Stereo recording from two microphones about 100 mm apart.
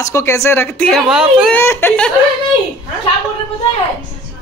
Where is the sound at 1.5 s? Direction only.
20° left (ahead or behind).